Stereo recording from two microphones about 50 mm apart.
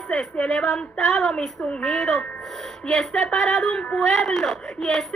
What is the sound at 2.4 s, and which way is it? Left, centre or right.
Music, centre.